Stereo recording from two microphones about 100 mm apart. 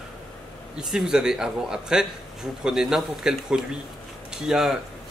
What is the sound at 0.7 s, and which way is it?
A man's voice, 5° right (ahead or behind).